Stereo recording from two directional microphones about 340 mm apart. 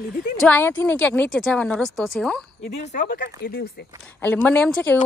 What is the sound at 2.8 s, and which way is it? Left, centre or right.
Speech, left.